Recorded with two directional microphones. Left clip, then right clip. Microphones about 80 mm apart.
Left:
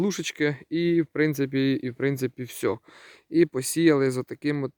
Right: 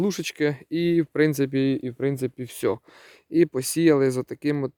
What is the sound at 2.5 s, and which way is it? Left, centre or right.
Speech, centre.